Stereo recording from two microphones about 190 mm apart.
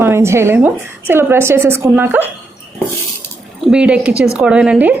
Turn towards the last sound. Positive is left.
turn(degrees=-10)  # may be behind; listen again after turning